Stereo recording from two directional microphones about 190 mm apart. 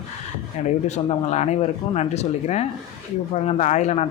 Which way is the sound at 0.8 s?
35° left (ahead or behind).